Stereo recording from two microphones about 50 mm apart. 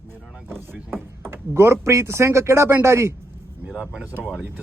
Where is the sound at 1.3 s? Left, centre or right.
Right.